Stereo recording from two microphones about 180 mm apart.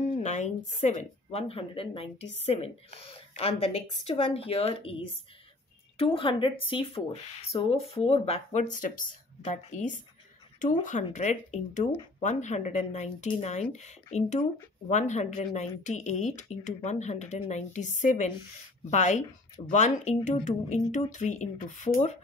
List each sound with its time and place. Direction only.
0.2 s a woman's voice: 40° left (ahead or behind)